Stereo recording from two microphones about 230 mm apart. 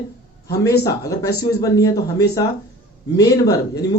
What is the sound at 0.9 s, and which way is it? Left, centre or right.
Speech, centre.